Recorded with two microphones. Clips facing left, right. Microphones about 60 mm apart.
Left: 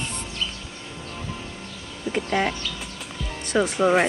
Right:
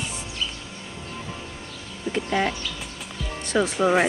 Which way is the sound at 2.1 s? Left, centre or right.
Centre.